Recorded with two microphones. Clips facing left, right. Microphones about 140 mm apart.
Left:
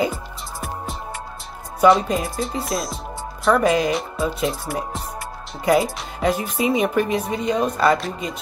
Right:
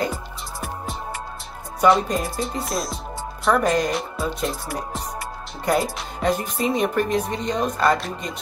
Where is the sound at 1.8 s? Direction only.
Centre (ahead or behind).